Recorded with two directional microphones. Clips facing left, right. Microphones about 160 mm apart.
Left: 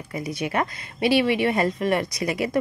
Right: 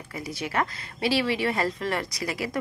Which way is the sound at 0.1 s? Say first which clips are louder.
Left 4 dB; 20° left (ahead or behind).